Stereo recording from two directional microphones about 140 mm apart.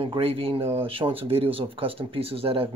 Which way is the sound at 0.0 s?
40° right (ahead or behind).